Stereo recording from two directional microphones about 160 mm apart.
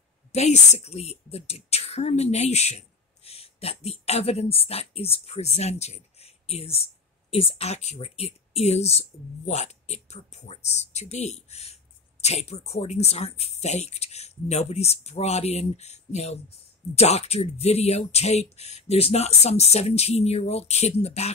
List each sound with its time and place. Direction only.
0.3 s speech: 45° left (ahead or behind)